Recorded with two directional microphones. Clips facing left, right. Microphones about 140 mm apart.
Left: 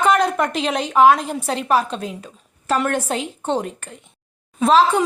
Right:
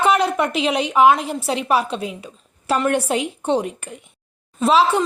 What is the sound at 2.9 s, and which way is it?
A woman's voice, 10° right (ahead or behind).